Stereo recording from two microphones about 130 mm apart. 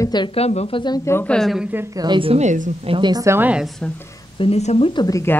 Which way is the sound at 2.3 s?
55° right (ahead or behind).